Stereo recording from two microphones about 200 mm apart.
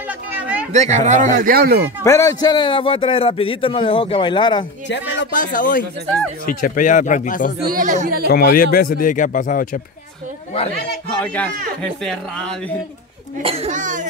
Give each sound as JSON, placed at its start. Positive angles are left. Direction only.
{"t": 0.7, "sound": "a child's voice", "side_deg": -35}
{"t": 1.3, "sound": "speech", "side_deg": -50}
{"t": 2.0, "sound": "a man's voice", "side_deg": 15}
{"t": 4.8, "sound": "speech", "side_deg": 65}
{"t": 5.3, "sound": "speech", "side_deg": 45}
{"t": 7.6, "sound": "speech", "side_deg": -45}
{"t": 8.3, "sound": "speech", "side_deg": 50}
{"t": 11.1, "sound": "a man's voice", "side_deg": 10}
{"t": 13.4, "sound": "a child's voice", "side_deg": -30}